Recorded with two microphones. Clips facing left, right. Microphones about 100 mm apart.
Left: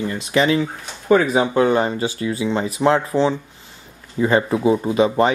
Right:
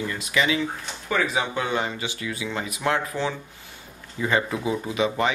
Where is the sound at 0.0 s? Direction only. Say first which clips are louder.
Left 6 dB; 30° left (ahead or behind).